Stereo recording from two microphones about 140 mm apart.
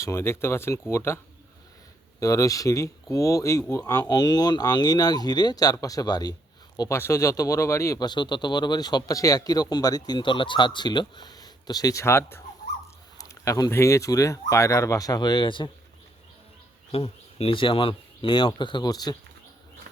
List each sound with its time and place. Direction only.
0.0 s speech: 20° left (ahead or behind)
2.2 s speech: 25° left (ahead or behind)
16.9 s speech: 45° left (ahead or behind); by 19.1 s 30° left (ahead or behind)